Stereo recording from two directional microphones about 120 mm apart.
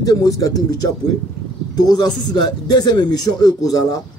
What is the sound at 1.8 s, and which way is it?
A man's voice, 35° left (ahead or behind).